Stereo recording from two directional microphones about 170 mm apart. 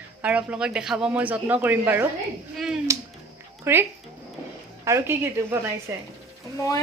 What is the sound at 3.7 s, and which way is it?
Speech, 15° right (ahead or behind).